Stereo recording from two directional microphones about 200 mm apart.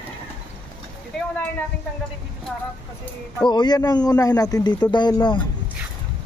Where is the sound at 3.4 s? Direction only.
20° left (ahead or behind).